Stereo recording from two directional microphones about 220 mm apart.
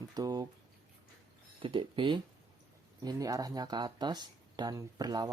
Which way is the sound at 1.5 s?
20° right (ahead or behind).